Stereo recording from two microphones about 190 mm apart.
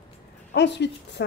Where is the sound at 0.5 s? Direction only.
65° left (ahead or behind).